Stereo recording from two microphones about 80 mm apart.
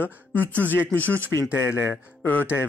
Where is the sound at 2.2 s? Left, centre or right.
Left.